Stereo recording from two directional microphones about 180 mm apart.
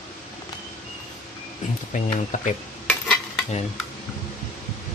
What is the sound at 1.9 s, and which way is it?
Speech, 40° left (ahead or behind).